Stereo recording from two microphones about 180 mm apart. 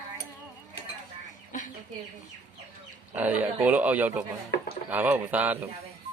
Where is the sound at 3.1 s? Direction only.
10° right (ahead or behind).